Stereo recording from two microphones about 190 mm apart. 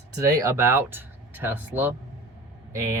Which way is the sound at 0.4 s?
15° right (ahead or behind).